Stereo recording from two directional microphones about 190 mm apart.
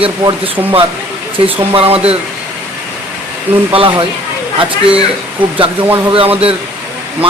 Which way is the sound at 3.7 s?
25° right (ahead or behind).